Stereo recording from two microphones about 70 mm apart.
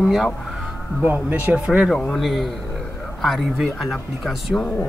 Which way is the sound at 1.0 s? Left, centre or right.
Right.